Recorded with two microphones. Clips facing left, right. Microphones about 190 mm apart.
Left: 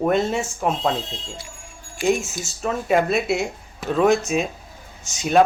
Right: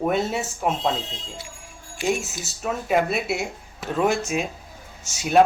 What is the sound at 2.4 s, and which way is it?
Speech, 5° right (ahead or behind).